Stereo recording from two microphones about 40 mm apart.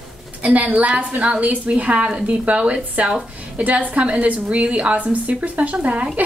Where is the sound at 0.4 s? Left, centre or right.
Right.